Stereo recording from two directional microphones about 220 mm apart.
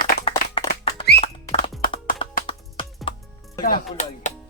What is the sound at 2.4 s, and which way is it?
Music, 25° left (ahead or behind).